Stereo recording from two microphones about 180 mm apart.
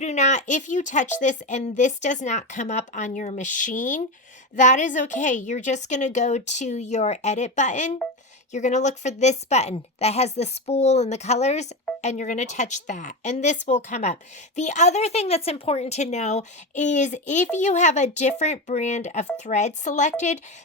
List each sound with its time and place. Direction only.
0.0 s a woman's voice: 40° left (ahead or behind)